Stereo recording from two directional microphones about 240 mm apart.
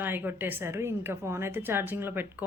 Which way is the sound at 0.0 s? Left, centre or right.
Centre.